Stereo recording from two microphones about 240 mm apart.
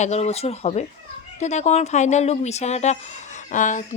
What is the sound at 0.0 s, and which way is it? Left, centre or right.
Speech, left.